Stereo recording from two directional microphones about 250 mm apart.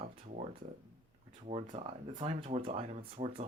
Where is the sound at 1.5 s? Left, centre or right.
Right.